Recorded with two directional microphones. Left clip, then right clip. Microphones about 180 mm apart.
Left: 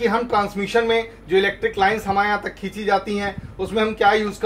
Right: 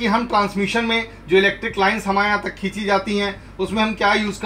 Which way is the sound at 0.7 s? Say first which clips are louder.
Left 2 dB; 20° left (ahead or behind).